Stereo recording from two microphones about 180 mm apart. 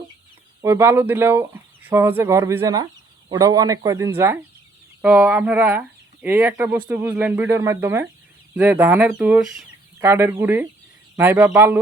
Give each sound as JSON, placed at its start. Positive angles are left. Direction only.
{"t": 0.6, "sound": "speech", "side_deg": -15}